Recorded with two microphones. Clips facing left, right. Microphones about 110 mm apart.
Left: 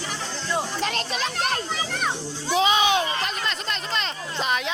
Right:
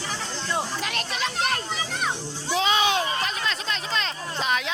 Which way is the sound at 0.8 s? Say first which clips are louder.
Left 3 dB; 35° left (ahead or behind).